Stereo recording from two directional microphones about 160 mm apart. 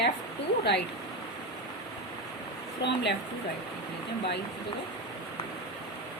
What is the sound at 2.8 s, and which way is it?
Speech, 90° left.